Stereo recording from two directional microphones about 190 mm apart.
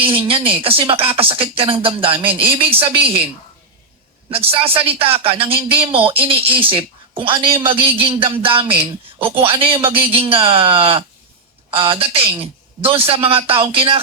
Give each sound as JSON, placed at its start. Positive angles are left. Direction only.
{"t": 0.0, "sound": "speech", "side_deg": -30}
{"t": 4.4, "sound": "speech", "side_deg": -30}